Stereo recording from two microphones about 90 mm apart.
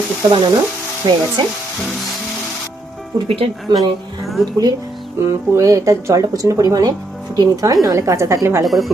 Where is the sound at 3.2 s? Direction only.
90° right.